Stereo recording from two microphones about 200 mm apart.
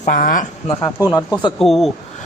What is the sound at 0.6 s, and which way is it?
Speech, 15° left (ahead or behind).